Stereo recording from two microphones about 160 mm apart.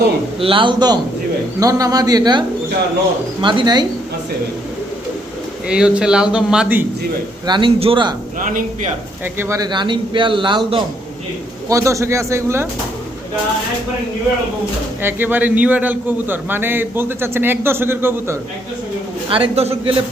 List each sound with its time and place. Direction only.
0.3 s a man's voice: 35° right (ahead or behind)
3.4 s a man's voice: 25° right (ahead or behind)
5.6 s speech: 5° right (ahead or behind)
7.4 s a man's voice: 30° right (ahead or behind)
8.4 s speech: 55° right (ahead or behind)
9.2 s a man's voice: 15° right (ahead or behind)
9.6 s a man's voice: 30° right (ahead or behind)
11.7 s a man's voice: 20° right (ahead or behind)
15.0 s a man's voice: 10° right (ahead or behind)
19.3 s a man's voice: 35° right (ahead or behind)